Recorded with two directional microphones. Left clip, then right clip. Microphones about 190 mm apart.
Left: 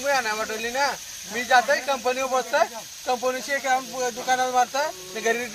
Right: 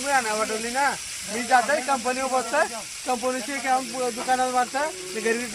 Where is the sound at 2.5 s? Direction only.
35° left (ahead or behind).